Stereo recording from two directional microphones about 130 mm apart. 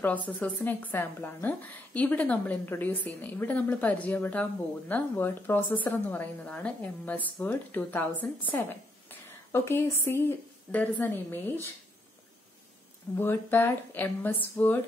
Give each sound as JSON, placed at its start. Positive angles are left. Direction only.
{"t": 0.4, "sound": "a woman's voice", "side_deg": 15}
{"t": 9.5, "sound": "a woman's voice", "side_deg": 20}
{"t": 13.1, "sound": "a woman's voice", "side_deg": 15}